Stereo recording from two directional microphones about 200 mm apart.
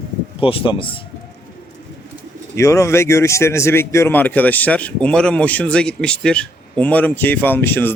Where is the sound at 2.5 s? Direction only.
15° left (ahead or behind).